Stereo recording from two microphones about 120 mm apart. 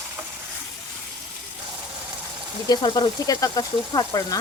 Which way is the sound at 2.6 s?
35° left (ahead or behind).